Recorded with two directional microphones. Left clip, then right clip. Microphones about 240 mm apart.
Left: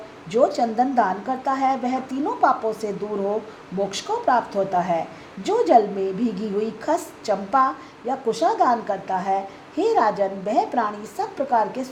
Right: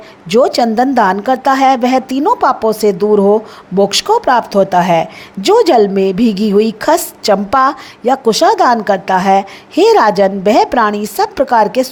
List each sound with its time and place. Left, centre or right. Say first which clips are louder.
0.3 s a woman's voice: right 9 dB; right